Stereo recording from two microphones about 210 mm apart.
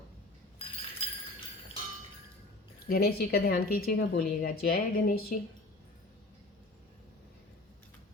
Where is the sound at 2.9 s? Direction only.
50° left (ahead or behind).